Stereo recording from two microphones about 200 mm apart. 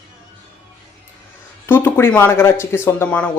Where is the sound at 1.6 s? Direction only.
10° left (ahead or behind).